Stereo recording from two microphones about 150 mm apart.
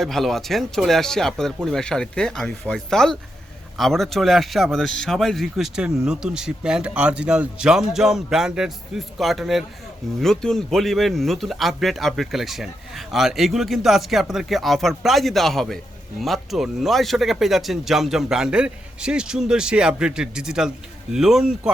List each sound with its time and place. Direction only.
0.0 s speech: centre (ahead or behind)